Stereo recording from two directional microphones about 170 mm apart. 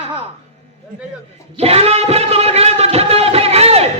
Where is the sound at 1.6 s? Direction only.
35° right (ahead or behind).